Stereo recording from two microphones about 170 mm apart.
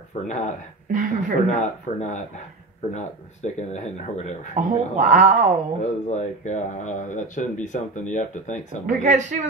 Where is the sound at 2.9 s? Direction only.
40° left (ahead or behind).